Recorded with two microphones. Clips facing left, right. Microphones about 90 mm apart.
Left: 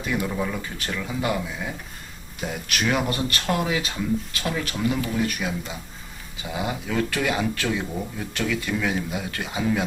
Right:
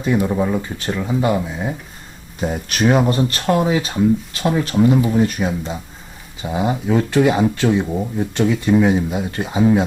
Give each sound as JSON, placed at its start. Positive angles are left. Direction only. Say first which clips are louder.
{"t": 0.0, "sound": "speech", "louder": "right 8 dB", "side_deg": -30}